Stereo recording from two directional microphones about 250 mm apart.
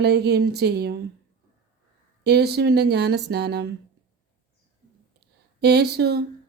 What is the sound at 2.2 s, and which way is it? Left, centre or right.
Speech, right.